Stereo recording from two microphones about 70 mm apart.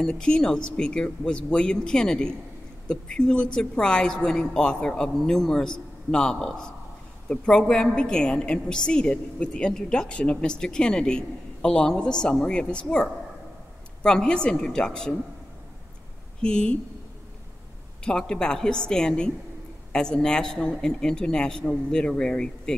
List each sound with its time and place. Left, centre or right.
0.0 s a woman's voice: centre
16.3 s a woman's voice: centre
18.0 s a woman's voice: centre